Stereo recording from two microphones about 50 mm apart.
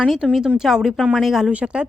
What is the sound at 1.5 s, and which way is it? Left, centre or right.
Speech, right.